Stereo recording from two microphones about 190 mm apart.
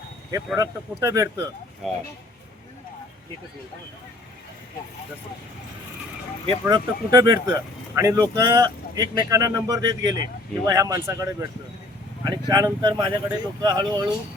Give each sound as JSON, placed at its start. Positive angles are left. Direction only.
{"t": 0.3, "sound": "speech", "side_deg": -15}
{"t": 1.8, "sound": "speech", "side_deg": 0}
{"t": 6.7, "sound": "speech", "side_deg": -20}